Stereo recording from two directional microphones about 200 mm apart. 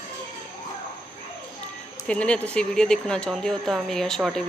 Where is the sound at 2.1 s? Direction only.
5° left (ahead or behind).